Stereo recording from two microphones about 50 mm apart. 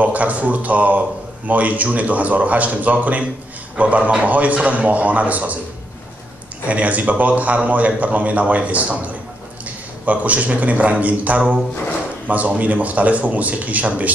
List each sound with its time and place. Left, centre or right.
0.0 s speech: right
6.6 s a man's voice: right